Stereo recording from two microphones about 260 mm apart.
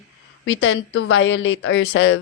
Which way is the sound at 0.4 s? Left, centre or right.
Left.